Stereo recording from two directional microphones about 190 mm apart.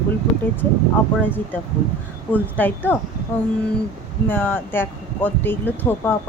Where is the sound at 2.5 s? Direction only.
10° left (ahead or behind).